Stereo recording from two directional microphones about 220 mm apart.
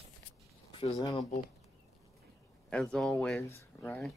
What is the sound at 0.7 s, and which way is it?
Speech, 20° left (ahead or behind).